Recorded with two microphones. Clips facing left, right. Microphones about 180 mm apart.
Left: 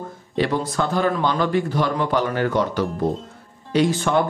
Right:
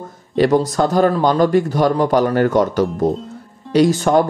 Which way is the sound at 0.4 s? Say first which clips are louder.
Right 7 dB; 40° right (ahead or behind).